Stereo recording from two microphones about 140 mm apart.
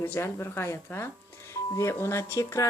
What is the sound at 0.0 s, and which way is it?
Speech, 20° left (ahead or behind).